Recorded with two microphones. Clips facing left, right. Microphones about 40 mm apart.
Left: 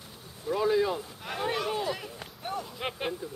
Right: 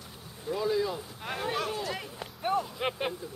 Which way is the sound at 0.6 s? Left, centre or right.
Left.